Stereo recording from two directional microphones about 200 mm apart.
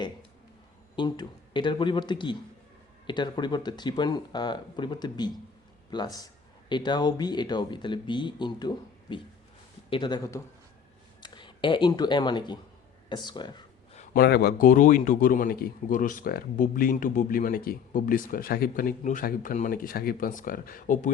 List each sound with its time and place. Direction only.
0.9 s speech: 20° left (ahead or behind)
13.9 s a man's voice: 40° left (ahead or behind)